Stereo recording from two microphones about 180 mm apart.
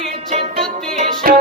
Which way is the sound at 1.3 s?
50° right (ahead or behind).